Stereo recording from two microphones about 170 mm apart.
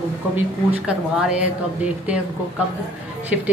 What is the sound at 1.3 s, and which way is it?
Speech, 5° right (ahead or behind).